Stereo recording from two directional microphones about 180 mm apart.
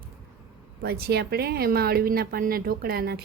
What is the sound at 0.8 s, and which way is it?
A woman's voice, 60° right (ahead or behind).